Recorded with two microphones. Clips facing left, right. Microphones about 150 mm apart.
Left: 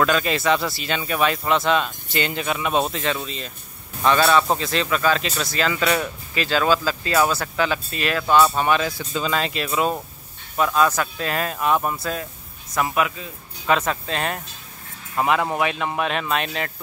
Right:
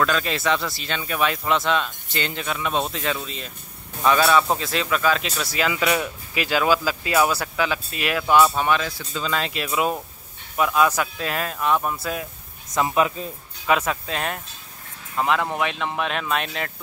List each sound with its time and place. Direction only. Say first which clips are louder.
0.0 s speech: left 2 dB; 5° left (ahead or behind)
2.9 s speech: left 2 dB; centre (ahead or behind)
8.5 s speech: left 1 dB; centre (ahead or behind)
8.8 s speech: left 4 dB; 15° left (ahead or behind)
9.3 s speech: even; centre (ahead or behind)
11.5 s speech: left 1 dB; 10° left (ahead or behind)
12.0 s speech: left 1 dB; 10° right (ahead or behind)
12.7 s speech: right 1 dB; 25° right (ahead or behind)
13.7 s speech: left 1 dB; 5° right (ahead or behind)